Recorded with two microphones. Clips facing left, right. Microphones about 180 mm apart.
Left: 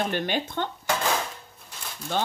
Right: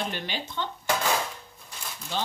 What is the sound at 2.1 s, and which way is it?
Speech, 55° left (ahead or behind).